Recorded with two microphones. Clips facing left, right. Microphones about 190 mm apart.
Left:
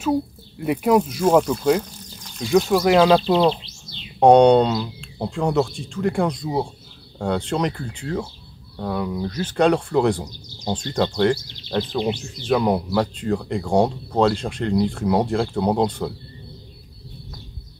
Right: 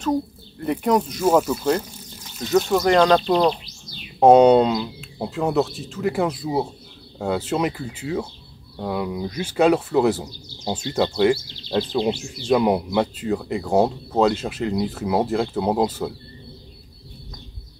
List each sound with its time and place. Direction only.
0.0 s speech: 5° left (ahead or behind)
1.2 s speech: 5° right (ahead or behind)
1.8 s a sound: 5° right (ahead or behind)
2.6 s speech: 5° left (ahead or behind)
3.6 s bird: 25° left (ahead or behind)
4.2 s speech: 5° right (ahead or behind)